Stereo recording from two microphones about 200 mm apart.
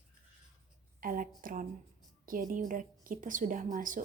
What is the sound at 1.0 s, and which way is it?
A woman's voice, 45° right (ahead or behind).